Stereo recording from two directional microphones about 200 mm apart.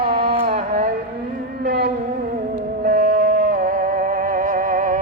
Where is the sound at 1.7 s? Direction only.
50° right (ahead or behind).